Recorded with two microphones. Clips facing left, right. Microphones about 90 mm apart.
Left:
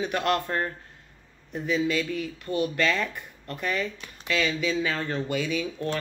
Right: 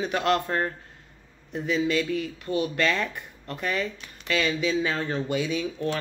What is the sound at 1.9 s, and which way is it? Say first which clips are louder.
Speech: right 2 dB; 35° right (ahead or behind).